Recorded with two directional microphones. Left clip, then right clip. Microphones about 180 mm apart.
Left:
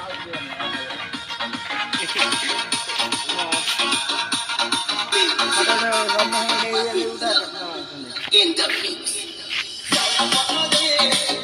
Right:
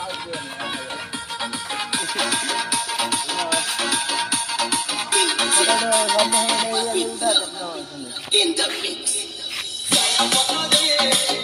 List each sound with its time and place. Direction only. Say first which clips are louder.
1.9 s music: left 2 dB; 25° right (ahead or behind)
8.4 s a sound: left 2 dB; 20° right (ahead or behind)
9.9 s music: even; 15° right (ahead or behind)